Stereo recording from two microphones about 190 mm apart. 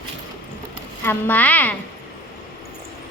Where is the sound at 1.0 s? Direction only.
10° left (ahead or behind).